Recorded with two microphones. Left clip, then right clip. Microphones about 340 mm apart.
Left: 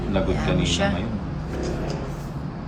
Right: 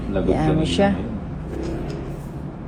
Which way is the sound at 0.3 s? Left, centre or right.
Centre.